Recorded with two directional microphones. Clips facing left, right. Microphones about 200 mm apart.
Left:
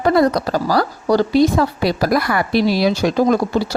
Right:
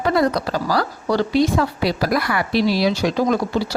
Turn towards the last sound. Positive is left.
turn(degrees=50)  # may be behind; listen again after turning